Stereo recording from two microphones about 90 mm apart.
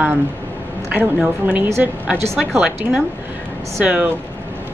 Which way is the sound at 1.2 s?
15° right (ahead or behind).